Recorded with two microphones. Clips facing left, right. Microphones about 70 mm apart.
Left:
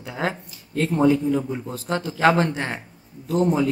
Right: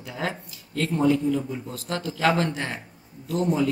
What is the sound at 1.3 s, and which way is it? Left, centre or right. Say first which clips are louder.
Speech: left 4 dB; left.